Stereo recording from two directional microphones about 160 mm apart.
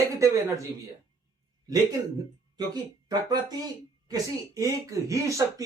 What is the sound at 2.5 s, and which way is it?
Speech, 25° right (ahead or behind).